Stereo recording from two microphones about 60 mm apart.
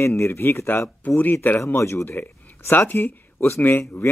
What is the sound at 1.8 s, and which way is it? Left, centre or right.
Speech, left.